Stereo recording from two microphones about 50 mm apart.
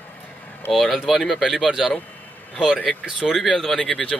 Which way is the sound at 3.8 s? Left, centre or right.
Centre.